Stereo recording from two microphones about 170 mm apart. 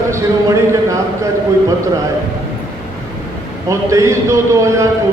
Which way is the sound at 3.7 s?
15° right (ahead or behind).